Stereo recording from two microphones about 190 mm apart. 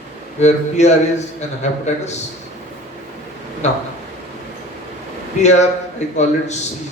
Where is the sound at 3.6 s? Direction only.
35° left (ahead or behind).